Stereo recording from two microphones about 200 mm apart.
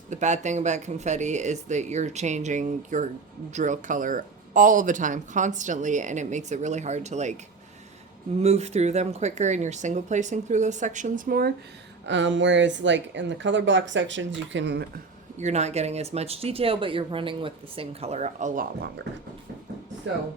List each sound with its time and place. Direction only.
0.1 s speech: 35° right (ahead or behind)
8.4 s speech: 35° right (ahead or behind)
12.0 s speech: 65° right (ahead or behind)
15.4 s speech: 35° right (ahead or behind)